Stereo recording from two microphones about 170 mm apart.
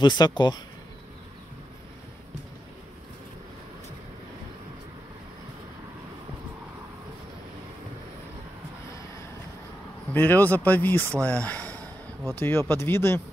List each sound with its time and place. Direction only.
0.0 s speech: 25° left (ahead or behind)
10.1 s speech: 10° left (ahead or behind)